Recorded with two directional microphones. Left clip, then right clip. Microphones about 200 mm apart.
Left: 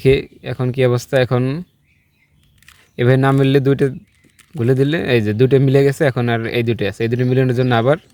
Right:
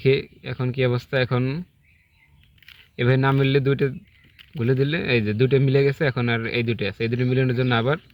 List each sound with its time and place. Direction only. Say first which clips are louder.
0.0 s speech: left 6 dB; 50° left (ahead or behind)
2.9 s speech: left 6 dB; 50° left (ahead or behind)